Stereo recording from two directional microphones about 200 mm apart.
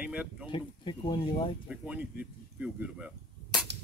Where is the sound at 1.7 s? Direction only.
5° right (ahead or behind).